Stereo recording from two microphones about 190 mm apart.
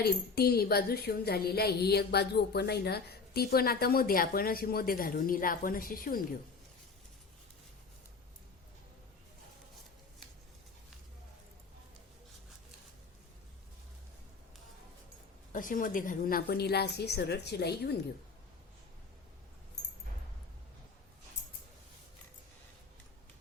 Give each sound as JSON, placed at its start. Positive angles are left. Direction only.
{"t": 0.0, "sound": "a woman's voice", "side_deg": 55}
{"t": 15.5, "sound": "a woman's voice", "side_deg": 45}